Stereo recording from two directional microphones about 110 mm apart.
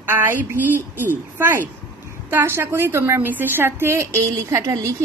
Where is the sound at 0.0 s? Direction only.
20° right (ahead or behind).